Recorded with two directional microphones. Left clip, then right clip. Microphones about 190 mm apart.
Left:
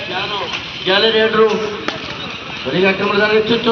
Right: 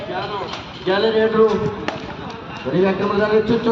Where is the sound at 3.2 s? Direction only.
30° right (ahead or behind).